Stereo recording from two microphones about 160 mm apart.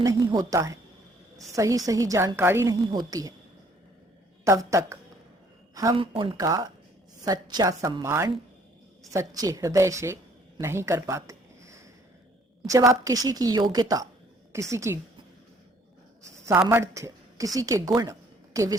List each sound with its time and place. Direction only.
0.0 s a woman's voice: 20° right (ahead or behind)
4.4 s a woman's voice: 20° right (ahead or behind)
12.9 s a woman's voice: 20° right (ahead or behind)
16.6 s a woman's voice: 20° right (ahead or behind)